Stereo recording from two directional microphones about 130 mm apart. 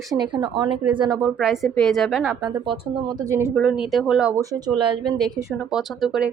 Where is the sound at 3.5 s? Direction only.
5° right (ahead or behind).